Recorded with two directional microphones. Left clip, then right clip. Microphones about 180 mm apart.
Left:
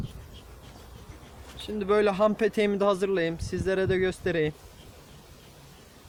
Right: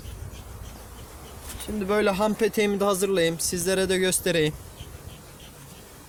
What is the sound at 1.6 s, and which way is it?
Speech, 35° left (ahead or behind).